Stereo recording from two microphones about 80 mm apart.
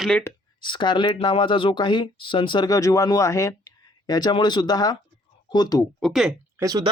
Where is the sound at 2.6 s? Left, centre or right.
Left.